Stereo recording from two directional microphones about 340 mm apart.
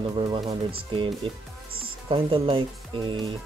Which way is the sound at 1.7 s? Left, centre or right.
Right.